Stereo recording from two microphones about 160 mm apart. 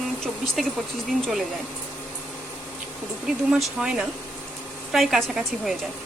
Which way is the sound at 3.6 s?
5° right (ahead or behind).